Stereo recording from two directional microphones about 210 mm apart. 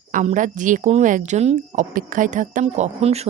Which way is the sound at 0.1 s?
35° right (ahead or behind).